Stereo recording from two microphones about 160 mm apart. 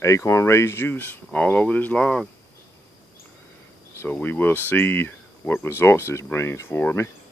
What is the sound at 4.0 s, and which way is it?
Speech, 10° left (ahead or behind).